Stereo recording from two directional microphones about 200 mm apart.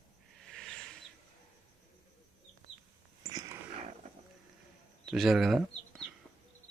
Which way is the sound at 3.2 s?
15° right (ahead or behind).